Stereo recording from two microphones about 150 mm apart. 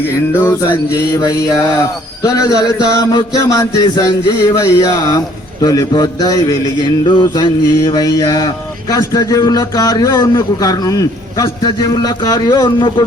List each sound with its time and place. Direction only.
0.3 s speech: 15° left (ahead or behind)